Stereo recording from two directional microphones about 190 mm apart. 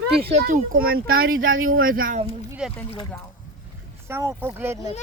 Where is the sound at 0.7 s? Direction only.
50° right (ahead or behind).